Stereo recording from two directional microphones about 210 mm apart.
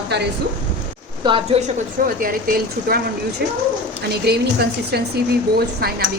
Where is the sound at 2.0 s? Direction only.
45° right (ahead or behind).